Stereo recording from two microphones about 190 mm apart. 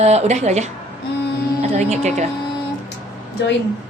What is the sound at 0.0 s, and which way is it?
Speech, 35° right (ahead or behind).